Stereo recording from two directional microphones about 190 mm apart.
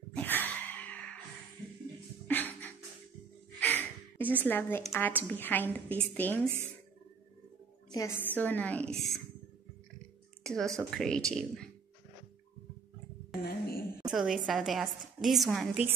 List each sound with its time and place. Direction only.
0.1 s a sound: 10° left (ahead or behind)
2.2 s a sound: 10° left (ahead or behind)
4.9 s speech: 10° left (ahead or behind)
7.9 s speech: 15° left (ahead or behind)
10.4 s a woman's voice: centre (ahead or behind)
13.4 s speech: 55° left (ahead or behind)
14.0 s a woman's voice: centre (ahead or behind)